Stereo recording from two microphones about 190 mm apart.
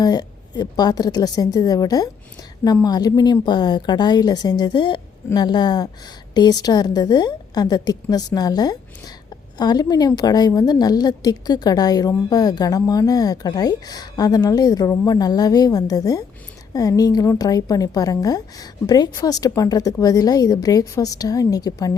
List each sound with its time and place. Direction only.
0.0 s a woman's voice: 20° left (ahead or behind)